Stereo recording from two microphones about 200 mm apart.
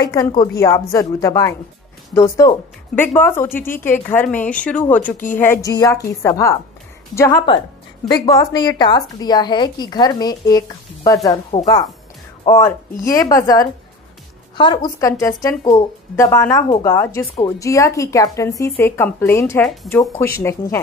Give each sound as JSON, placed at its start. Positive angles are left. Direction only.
{"t": 0.0, "sound": "a woman's voice", "side_deg": 20}